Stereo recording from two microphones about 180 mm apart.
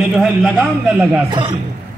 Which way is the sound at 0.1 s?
5° right (ahead or behind).